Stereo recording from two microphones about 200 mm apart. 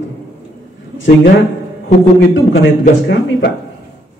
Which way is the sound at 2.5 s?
65° left (ahead or behind).